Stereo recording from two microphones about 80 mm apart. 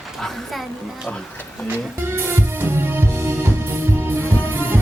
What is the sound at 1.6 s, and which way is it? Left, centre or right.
Music, right.